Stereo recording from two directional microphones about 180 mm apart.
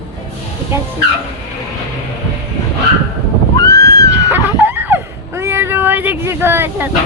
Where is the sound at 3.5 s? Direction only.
20° left (ahead or behind).